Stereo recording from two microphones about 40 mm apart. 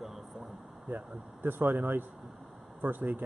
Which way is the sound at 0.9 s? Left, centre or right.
Right.